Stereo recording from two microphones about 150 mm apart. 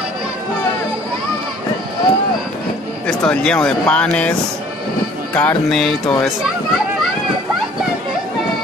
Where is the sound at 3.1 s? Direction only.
5° left (ahead or behind).